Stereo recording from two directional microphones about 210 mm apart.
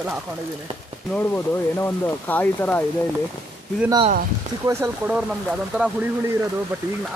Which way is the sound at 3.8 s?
20° right (ahead or behind).